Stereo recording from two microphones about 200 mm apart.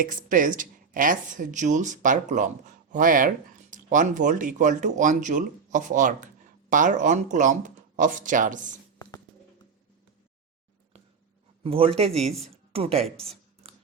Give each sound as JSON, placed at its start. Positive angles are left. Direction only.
{"t": 0.0, "sound": "a woman's voice", "side_deg": -40}
{"t": 11.6, "sound": "a man's voice", "side_deg": -25}
{"t": 13.2, "sound": "a sound", "side_deg": -30}